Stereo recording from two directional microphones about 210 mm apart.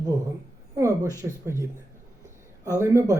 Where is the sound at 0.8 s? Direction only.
15° right (ahead or behind).